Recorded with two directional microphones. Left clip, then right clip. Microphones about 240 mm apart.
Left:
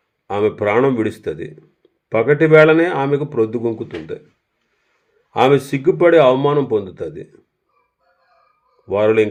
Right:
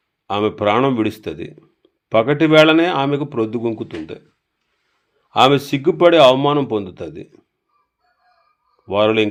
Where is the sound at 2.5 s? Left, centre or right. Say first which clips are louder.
Left 1 dB; right.